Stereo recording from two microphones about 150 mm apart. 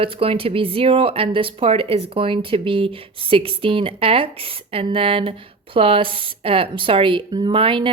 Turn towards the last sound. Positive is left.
turn(degrees=-35)  # may be behind; listen again after turning